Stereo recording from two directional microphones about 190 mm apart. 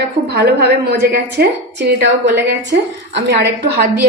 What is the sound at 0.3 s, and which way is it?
A woman's voice, 60° right (ahead or behind).